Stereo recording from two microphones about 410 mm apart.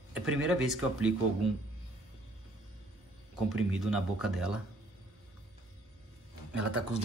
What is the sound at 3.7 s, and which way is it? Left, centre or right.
Speech, centre.